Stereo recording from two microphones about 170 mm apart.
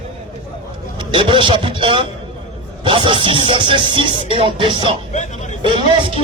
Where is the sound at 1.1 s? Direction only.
30° right (ahead or behind).